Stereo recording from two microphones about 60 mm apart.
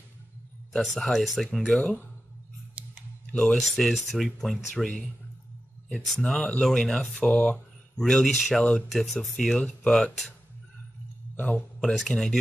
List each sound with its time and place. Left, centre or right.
0.7 s speech: centre
3.3 s speech: centre
8.0 s speech: centre
11.3 s speech: centre
11.8 s speech: centre